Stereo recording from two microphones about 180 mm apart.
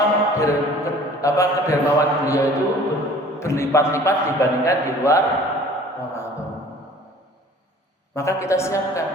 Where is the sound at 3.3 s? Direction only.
15° left (ahead or behind).